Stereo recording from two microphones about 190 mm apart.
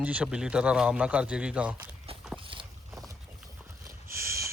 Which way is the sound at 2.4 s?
25° right (ahead or behind).